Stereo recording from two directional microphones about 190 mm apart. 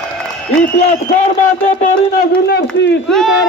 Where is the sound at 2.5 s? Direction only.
60° left (ahead or behind).